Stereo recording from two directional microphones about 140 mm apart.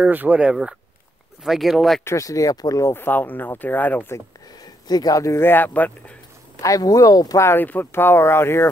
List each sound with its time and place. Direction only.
0.0 s speech: 10° right (ahead or behind)
2.0 s speech: 25° left (ahead or behind)
4.8 s speech: 30° left (ahead or behind); by 6.1 s 10° left (ahead or behind)
6.6 s speech: 25° left (ahead or behind)